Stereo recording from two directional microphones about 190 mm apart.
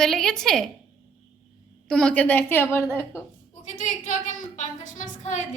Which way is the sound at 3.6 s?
40° left (ahead or behind).